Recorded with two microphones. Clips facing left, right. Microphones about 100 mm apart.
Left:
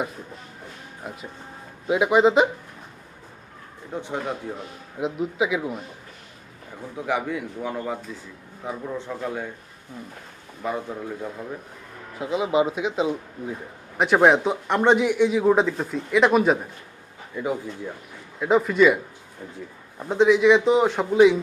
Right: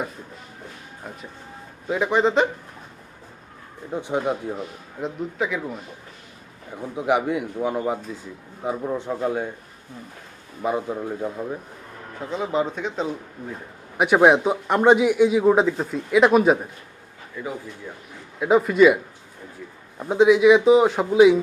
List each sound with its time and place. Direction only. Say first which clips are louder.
1.0 s speech: left 2 dB; 5° left (ahead or behind)
3.9 s a man's voice: right 5 dB; 15° right (ahead or behind)
4.9 s speech: left 2 dB; 5° left (ahead or behind)
6.9 s a man's voice: right 5 dB; 20° right (ahead or behind)
10.6 s a man's voice: right 4 dB; 20° right (ahead or behind)
12.2 s speech: left 3 dB; 10° left (ahead or behind)
14.0 s speech: right 1 dB; 5° right (ahead or behind)
17.3 s speech: left 4 dB; 15° left (ahead or behind)
18.3 s speech: right 2 dB; 5° right (ahead or behind)
20.0 s speech: right 2 dB; 5° right (ahead or behind)